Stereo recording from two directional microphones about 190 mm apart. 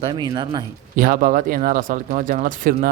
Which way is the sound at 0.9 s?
45° right (ahead or behind).